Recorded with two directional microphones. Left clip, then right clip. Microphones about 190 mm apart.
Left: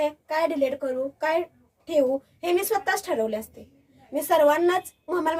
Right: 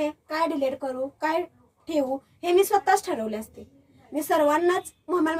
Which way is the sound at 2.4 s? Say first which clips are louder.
Right 6 dB; 15° left (ahead or behind).